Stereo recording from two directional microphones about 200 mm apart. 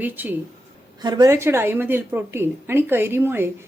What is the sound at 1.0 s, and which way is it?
A woman's voice, 20° right (ahead or behind).